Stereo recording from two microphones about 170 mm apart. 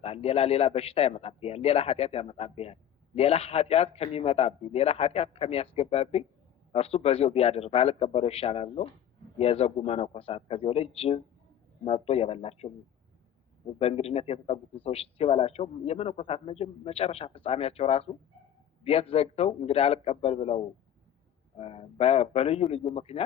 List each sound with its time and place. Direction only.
0.0 s a man's voice: 35° left (ahead or behind)
13.7 s a man's voice: 35° left (ahead or behind)
21.6 s a man's voice: 35° left (ahead or behind)